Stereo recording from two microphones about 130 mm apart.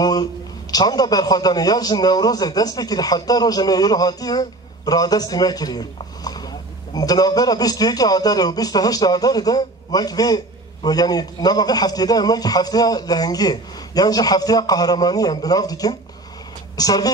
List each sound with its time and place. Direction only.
0.0 s a man's voice: 30° left (ahead or behind)